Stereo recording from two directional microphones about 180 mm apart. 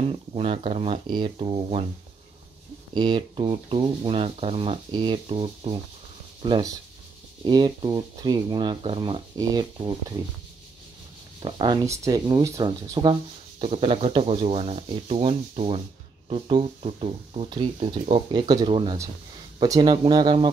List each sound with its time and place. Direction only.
0.3 s speech: 30° right (ahead or behind)
2.9 s speech: 25° right (ahead or behind)
11.4 s speech: 25° right (ahead or behind)